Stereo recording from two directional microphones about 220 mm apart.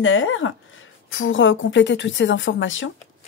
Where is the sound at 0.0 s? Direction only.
65° left (ahead or behind).